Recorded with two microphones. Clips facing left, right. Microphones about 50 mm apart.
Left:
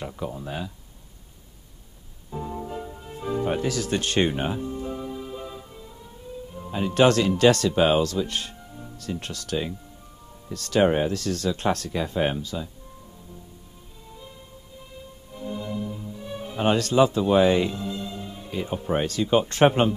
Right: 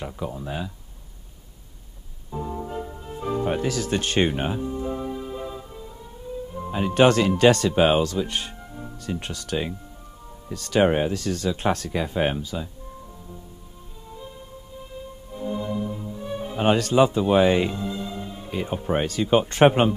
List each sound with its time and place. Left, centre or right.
0.0 s speech: centre
2.3 s music: centre
2.6 s speech: centre
4.7 s music: centre
6.7 s speech: centre
15.3 s music: centre
15.9 s music: right
16.3 s speech: centre